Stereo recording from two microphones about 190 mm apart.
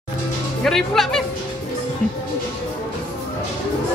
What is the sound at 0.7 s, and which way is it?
Speech, centre (ahead or behind).